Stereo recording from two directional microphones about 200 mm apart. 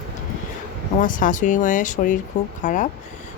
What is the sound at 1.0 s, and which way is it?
Speech, 40° left (ahead or behind).